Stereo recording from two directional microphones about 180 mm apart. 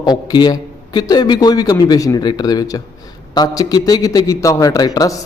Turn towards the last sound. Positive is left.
turn(degrees=20)  # may be behind; listen again after turning